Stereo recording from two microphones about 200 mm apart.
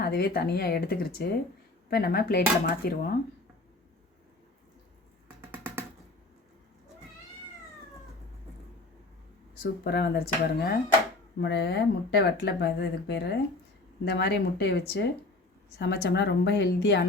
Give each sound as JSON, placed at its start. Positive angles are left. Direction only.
{"t": 0.0, "sound": "speech", "side_deg": 50}
{"t": 5.5, "sound": "a sound", "side_deg": -10}
{"t": 9.8, "sound": "speech", "side_deg": 55}